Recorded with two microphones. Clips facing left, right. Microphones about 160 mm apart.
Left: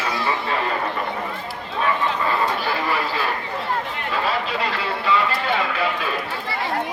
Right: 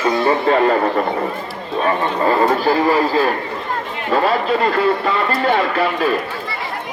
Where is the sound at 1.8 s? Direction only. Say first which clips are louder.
Right 5 dB; 40° right (ahead or behind).